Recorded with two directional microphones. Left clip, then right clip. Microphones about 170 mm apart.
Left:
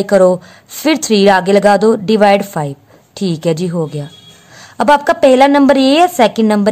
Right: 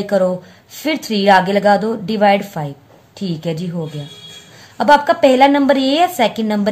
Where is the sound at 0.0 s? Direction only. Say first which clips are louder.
Left 7 dB; 50° left (ahead or behind).